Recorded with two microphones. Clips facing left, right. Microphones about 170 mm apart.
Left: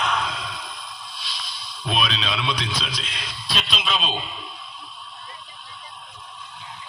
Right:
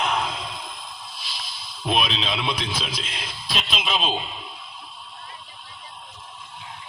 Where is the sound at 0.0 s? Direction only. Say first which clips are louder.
Right 1 dB; 25° right (ahead or behind).